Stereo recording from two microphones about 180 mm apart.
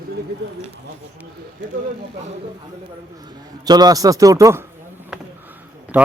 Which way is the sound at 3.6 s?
20° right (ahead or behind).